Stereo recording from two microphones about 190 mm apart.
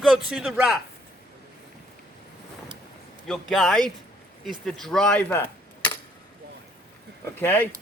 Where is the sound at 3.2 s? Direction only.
Centre (ahead or behind).